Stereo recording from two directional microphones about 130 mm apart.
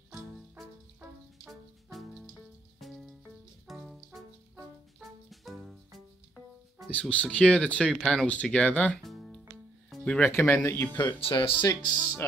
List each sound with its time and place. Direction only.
0.1 s music: centre (ahead or behind)
5.3 s music: centre (ahead or behind)
6.9 s speech: 10° left (ahead or behind)
9.8 s music: 5° left (ahead or behind)
10.3 s speech: 20° left (ahead or behind)
11.0 s speech: 40° left (ahead or behind)
11.6 s speech: 30° left (ahead or behind)